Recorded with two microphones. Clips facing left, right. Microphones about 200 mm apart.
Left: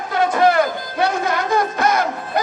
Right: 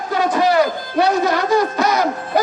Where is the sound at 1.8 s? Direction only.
50° left (ahead or behind).